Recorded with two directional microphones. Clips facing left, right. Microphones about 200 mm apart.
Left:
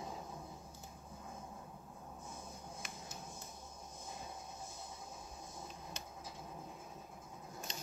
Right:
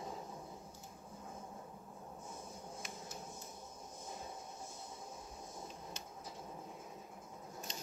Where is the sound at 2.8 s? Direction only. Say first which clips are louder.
Right 2 dB; 60° left (ahead or behind).